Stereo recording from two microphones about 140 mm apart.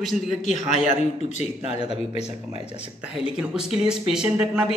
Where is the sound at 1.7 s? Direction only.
45° left (ahead or behind).